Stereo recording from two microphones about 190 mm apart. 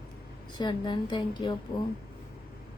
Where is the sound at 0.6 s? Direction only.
25° left (ahead or behind).